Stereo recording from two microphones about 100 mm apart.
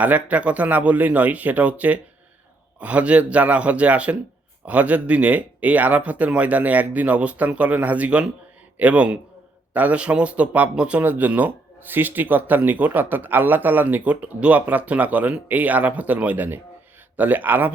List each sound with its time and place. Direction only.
0.0 s speech: 15° right (ahead or behind)